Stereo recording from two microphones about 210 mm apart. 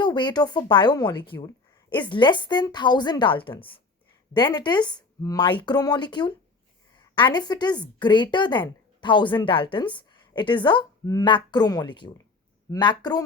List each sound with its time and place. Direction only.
0.0 s a woman's voice: 20° left (ahead or behind)